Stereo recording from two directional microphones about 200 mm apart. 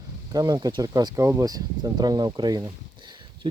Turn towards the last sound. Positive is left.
turn(degrees=-25)  # may be behind; listen again after turning